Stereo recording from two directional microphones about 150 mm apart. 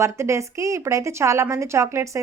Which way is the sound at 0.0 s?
20° right (ahead or behind).